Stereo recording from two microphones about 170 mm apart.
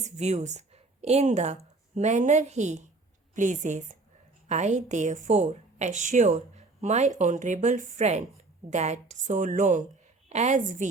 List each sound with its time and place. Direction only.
0.0 s a woman's voice: 40° right (ahead or behind)